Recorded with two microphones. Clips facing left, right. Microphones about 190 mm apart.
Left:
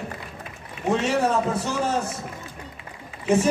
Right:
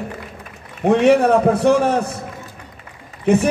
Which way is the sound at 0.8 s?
60° right (ahead or behind).